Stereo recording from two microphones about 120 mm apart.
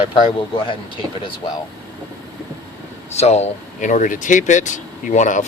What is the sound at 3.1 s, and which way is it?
Speech, 65° left (ahead or behind).